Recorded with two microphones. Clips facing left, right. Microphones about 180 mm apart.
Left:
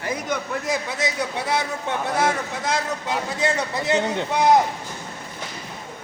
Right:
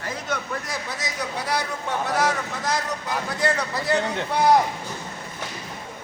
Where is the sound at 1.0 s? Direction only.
25° left (ahead or behind).